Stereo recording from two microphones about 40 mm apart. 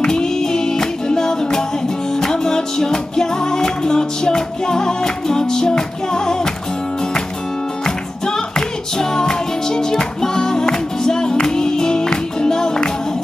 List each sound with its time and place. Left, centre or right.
0.0 s music: centre
7.8 s music: centre